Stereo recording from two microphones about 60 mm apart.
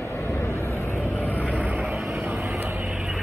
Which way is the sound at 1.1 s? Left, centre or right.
Left.